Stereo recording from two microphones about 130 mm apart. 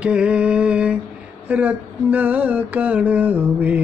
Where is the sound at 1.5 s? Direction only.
10° right (ahead or behind).